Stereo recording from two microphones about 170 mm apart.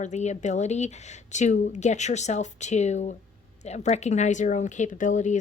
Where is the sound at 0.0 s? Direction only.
45° left (ahead or behind).